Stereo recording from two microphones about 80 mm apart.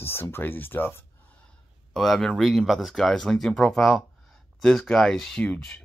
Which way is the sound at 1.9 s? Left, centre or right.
Centre.